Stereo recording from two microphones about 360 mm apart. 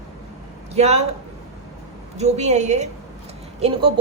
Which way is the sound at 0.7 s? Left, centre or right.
Centre.